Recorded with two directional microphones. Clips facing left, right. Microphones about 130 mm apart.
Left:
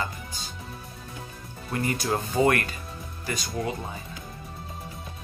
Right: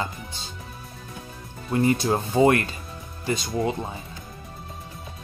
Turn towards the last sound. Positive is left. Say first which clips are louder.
# right 5 dB
turn(degrees=-25)  # may be behind; listen again after turning